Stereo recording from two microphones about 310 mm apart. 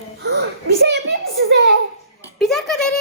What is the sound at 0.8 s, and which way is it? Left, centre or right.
A woman's voice, right.